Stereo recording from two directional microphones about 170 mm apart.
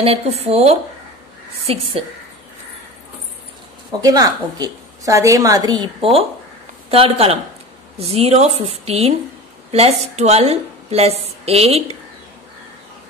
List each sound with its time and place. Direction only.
0.0 s a woman's voice: 35° right (ahead or behind)
4.0 s a woman's voice: 20° right (ahead or behind)